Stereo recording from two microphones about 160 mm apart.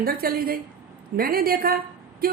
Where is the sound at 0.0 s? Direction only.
70° right (ahead or behind).